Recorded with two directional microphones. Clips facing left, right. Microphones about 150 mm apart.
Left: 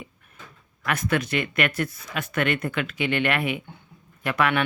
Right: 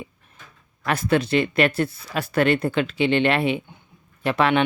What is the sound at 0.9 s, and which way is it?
Speech, 30° right (ahead or behind).